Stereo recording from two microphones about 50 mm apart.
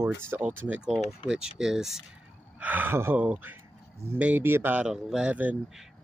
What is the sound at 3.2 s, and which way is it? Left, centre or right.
Speech, right.